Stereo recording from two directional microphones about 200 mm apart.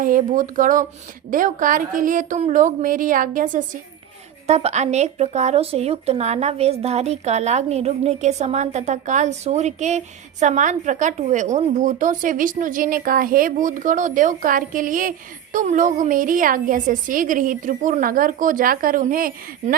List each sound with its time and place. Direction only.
0.0 s speech: 40° right (ahead or behind)